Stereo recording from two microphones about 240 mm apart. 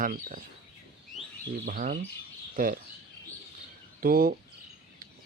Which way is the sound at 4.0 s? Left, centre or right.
Right.